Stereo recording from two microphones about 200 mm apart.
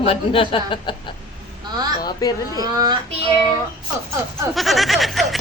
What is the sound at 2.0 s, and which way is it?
Speech, 20° left (ahead or behind).